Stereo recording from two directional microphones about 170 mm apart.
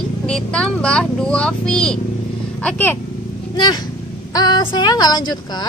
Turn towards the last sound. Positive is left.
turn(degrees=25)  # may be behind; listen again after turning